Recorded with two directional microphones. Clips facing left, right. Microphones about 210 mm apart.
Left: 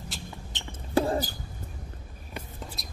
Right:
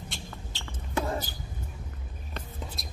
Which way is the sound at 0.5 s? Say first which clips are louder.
Left 1 dB; 20° left (ahead or behind).